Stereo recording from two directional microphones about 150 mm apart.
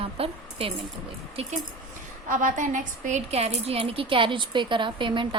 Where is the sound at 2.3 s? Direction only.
60° right (ahead or behind); by 5.4 s 35° right (ahead or behind).